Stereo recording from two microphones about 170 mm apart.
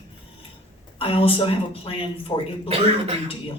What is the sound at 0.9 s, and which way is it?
Speech, 35° left (ahead or behind).